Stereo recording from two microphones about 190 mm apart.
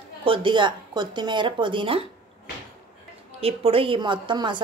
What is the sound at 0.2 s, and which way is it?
A woman's voice, 25° right (ahead or behind).